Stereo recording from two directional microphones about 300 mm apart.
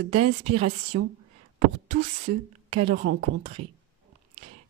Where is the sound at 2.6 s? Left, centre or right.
Centre.